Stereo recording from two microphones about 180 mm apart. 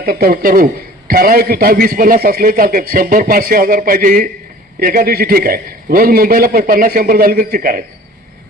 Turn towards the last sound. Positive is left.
turn(degrees=-55)  # may be behind; listen again after turning